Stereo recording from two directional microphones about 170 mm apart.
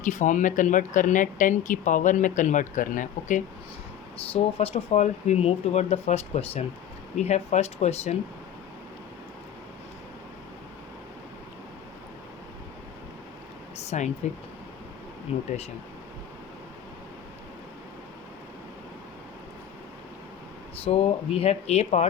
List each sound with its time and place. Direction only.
0.0 s speech: 45° left (ahead or behind)
4.3 s speech: 35° left (ahead or behind)
13.7 s a sound: 40° left (ahead or behind)
15.3 s speech: 35° left (ahead or behind)
20.8 s speech: 35° left (ahead or behind)